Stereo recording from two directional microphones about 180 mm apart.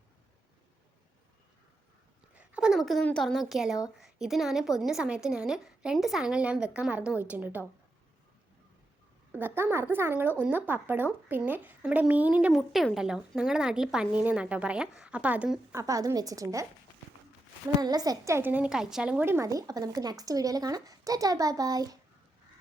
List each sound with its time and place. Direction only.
2.3 s a woman's voice: 5° right (ahead or behind)
9.3 s a woman's voice: 10° right (ahead or behind)
17.7 s a woman's voice: 20° right (ahead or behind)